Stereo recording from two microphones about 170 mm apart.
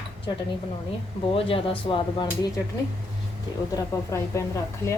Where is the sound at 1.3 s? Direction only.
30° left (ahead or behind).